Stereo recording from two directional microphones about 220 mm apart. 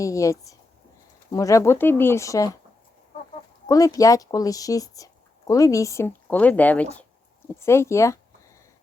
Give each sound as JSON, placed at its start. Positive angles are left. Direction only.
{"t": 0.0, "sound": "speech", "side_deg": 15}
{"t": 3.7, "sound": "speech", "side_deg": 15}